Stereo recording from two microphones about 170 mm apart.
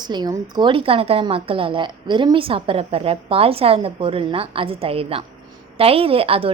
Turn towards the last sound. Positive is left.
turn(degrees=-35)  # may be behind; listen again after turning